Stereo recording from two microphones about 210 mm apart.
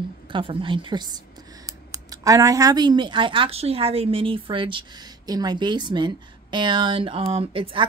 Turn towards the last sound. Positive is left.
turn(degrees=-25)  # may be behind; listen again after turning